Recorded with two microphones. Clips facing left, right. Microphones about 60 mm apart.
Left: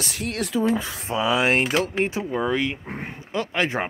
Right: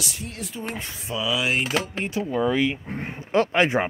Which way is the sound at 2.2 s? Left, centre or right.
Centre.